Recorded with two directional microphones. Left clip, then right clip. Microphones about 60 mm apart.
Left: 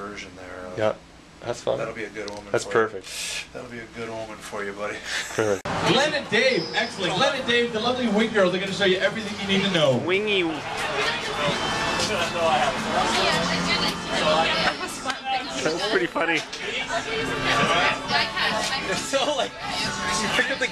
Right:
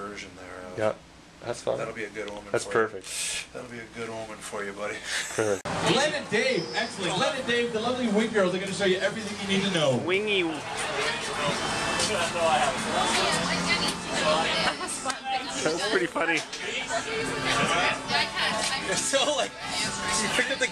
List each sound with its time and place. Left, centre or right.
0.8 s speech: centre
4.6 s speech: centre
5.9 s a man's voice: left
11.1 s vehicle: centre
12.3 s speech: centre
13.5 s music: centre
15.6 s speech: centre
18.0 s music: centre
19.1 s speech: right
19.7 s speech: centre